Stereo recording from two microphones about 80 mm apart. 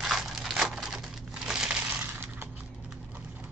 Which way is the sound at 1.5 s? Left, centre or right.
Centre.